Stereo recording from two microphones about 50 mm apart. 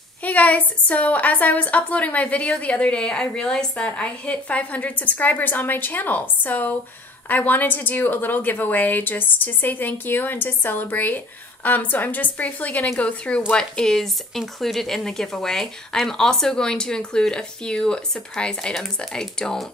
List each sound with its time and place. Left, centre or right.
0.2 s speech: left
3.0 s speech: centre